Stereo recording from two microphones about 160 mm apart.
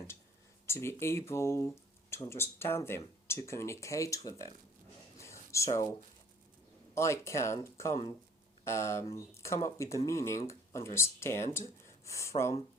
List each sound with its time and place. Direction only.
0.7 s speech: 15° left (ahead or behind)
5.1 s a sound: 20° left (ahead or behind)
6.9 s speech: 15° left (ahead or behind)